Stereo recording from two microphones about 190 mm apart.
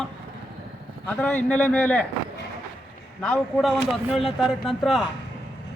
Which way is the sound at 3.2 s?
Centre (ahead or behind).